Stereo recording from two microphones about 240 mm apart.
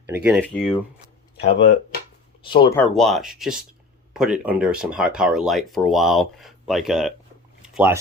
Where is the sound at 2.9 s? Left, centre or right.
Centre.